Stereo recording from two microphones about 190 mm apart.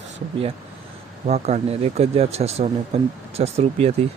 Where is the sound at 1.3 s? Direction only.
35° right (ahead or behind).